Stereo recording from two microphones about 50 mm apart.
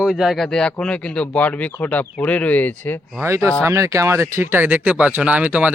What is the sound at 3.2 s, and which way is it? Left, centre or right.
Speech, right.